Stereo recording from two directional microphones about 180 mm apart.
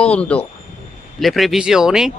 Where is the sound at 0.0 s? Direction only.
5° left (ahead or behind).